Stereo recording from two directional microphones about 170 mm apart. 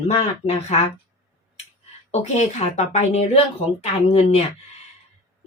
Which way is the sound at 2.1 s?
40° left (ahead or behind).